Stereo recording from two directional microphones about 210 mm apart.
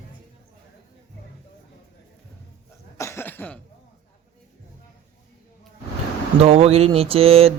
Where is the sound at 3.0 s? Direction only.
10° left (ahead or behind).